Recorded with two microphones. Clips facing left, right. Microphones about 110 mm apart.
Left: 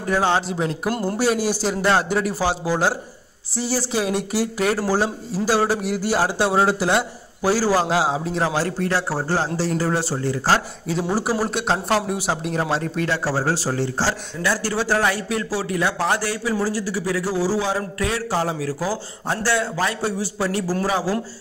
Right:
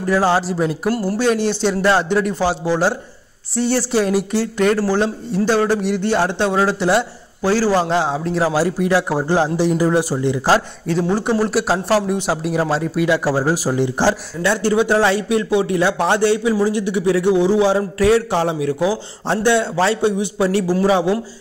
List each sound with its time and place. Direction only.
0.0 s a man's voice: centre (ahead or behind)
0.8 s speech: 20° left (ahead or behind)
1.2 s a man's voice: 10° left (ahead or behind); by 10.6 s 15° right (ahead or behind)
10.9 s speech: 5° left (ahead or behind)
11.5 s a man's voice: 5° right (ahead or behind); by 21.2 s 20° right (ahead or behind)